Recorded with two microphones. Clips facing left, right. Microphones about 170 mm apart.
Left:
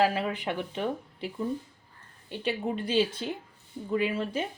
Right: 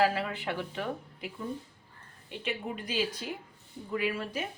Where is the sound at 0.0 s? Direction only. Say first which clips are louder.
Left 2 dB; 20° left (ahead or behind).